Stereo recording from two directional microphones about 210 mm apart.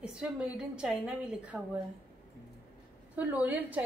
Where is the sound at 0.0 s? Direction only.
5° right (ahead or behind).